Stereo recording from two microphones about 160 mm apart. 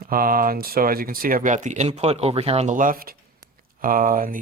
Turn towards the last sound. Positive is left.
turn(degrees=-60)  # may be behind; listen again after turning